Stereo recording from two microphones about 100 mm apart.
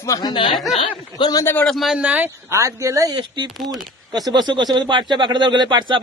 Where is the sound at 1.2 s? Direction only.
40° left (ahead or behind).